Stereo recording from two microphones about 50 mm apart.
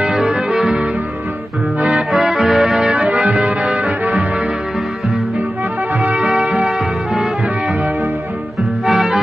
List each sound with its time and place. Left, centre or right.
0.1 s music: centre
1.8 s music: right
2.0 s music: centre
3.0 s music: right
5.9 s music: right
8.8 s music: centre